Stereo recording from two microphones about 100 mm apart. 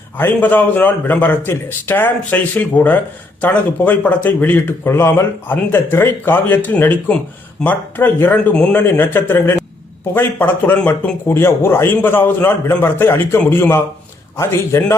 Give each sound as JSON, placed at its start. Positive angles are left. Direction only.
{"t": 0.2, "sound": "a man's voice", "side_deg": 20}